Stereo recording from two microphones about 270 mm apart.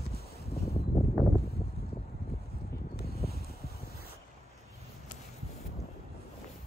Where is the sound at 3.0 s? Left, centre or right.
Left.